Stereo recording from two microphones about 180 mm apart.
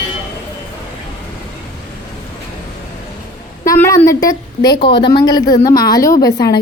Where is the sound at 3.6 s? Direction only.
15° left (ahead or behind).